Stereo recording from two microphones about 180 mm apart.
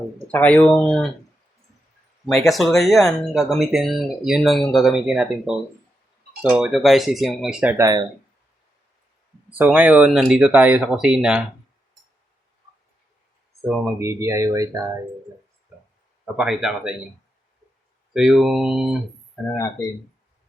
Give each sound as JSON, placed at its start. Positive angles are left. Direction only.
{"t": 0.3, "sound": "speech", "side_deg": 10}
{"t": 2.2, "sound": "speech", "side_deg": 0}
{"t": 9.6, "sound": "speech", "side_deg": -5}
{"t": 13.8, "sound": "speech", "side_deg": -15}
{"t": 16.2, "sound": "speech", "side_deg": -5}
{"t": 18.1, "sound": "speech", "side_deg": 0}
{"t": 19.5, "sound": "speech", "side_deg": 15}